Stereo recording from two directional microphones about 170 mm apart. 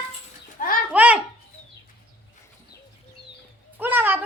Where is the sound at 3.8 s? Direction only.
10° right (ahead or behind).